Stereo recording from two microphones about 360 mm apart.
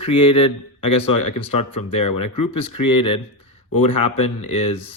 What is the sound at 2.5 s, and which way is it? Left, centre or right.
Speech, centre.